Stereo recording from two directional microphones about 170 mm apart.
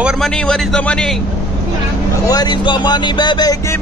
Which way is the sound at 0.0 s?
5° left (ahead or behind).